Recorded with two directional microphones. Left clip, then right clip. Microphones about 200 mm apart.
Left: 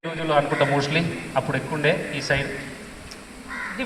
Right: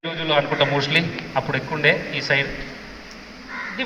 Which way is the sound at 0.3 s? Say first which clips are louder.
Right 1 dB; 5° right (ahead or behind).